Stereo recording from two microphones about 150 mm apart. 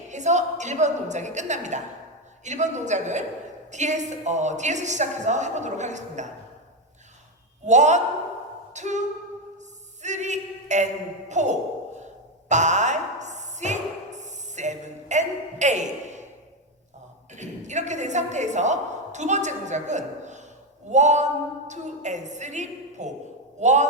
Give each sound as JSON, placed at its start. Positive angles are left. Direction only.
{"t": 0.1, "sound": "a woman's voice", "side_deg": -50}
{"t": 7.7, "sound": "a woman's voice", "side_deg": -50}
{"t": 8.7, "sound": "a sound", "side_deg": -50}
{"t": 11.3, "sound": "a woman's voice", "side_deg": -50}
{"t": 12.5, "sound": "a sound", "side_deg": -50}
{"t": 17.3, "sound": "a woman's voice", "side_deg": -50}